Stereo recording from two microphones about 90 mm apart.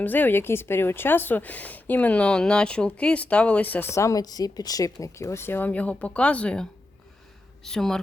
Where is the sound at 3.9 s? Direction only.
35° left (ahead or behind); by 6.6 s 10° left (ahead or behind).